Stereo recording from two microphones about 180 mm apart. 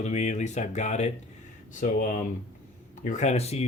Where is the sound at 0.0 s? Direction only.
40° left (ahead or behind).